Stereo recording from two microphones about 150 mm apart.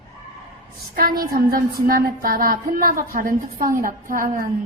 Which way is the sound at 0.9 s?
75° right (ahead or behind).